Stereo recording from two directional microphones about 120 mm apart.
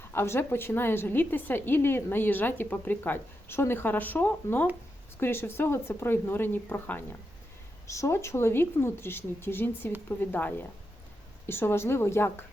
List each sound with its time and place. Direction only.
0.1 s a woman's voice: 20° left (ahead or behind)